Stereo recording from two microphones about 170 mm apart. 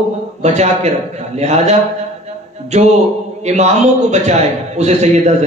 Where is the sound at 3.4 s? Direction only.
40° right (ahead or behind).